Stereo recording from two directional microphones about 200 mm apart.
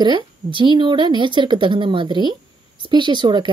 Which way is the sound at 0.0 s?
25° right (ahead or behind).